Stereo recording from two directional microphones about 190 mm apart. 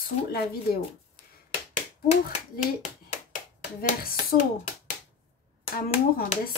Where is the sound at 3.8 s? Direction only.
40° left (ahead or behind).